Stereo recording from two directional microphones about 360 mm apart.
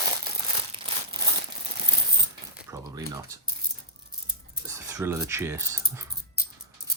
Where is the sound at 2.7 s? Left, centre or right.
Centre.